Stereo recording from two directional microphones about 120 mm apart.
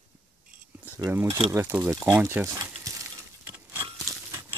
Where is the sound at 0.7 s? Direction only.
15° right (ahead or behind).